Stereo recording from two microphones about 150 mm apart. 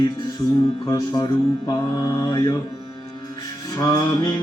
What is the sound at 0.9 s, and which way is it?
Mantra, 25° left (ahead or behind).